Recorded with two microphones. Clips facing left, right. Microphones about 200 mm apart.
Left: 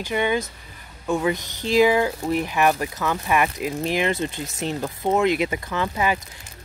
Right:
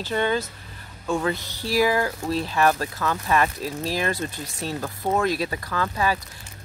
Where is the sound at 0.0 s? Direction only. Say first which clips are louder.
Left 1 dB; 15° left (ahead or behind).